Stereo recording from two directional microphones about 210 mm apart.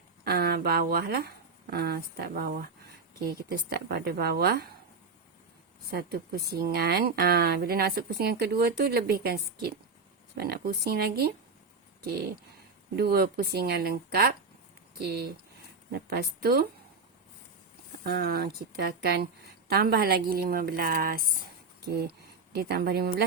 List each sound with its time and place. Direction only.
0.3 s speech: 50° right (ahead or behind)
5.9 s speech: 50° right (ahead or behind)
13.0 s speech: 45° right (ahead or behind)
18.0 s speech: 45° right (ahead or behind)